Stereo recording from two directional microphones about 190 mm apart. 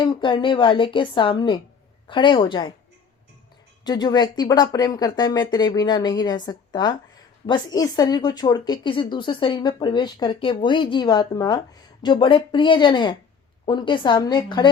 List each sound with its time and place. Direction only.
0.0 s a woman's voice: 25° left (ahead or behind)
3.8 s a woman's voice: 20° left (ahead or behind)